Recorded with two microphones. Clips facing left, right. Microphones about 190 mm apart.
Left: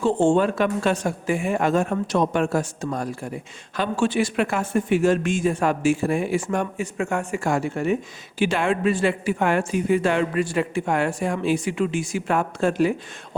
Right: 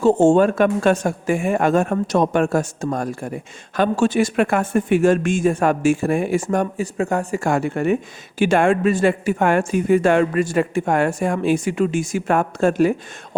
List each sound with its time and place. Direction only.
0.0 s speech: 45° right (ahead or behind)
7.4 s speech: 60° right (ahead or behind)
8.4 s speech: 50° right (ahead or behind)